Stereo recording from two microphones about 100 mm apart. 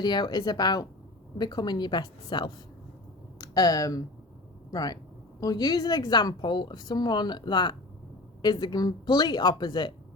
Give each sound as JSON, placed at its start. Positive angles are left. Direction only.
{"t": 0.0, "sound": "a woman's voice", "side_deg": 45}